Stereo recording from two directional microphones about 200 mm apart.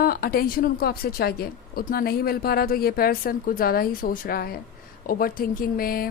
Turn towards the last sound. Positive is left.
turn(degrees=45)  # may be behind; listen again after turning